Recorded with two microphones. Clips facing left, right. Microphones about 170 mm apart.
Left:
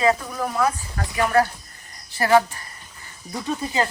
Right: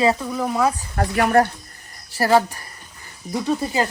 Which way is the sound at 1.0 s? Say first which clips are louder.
Right 8 dB; 55° right (ahead or behind).